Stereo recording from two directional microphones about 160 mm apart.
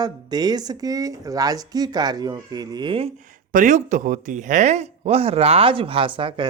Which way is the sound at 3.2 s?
55° right (ahead or behind).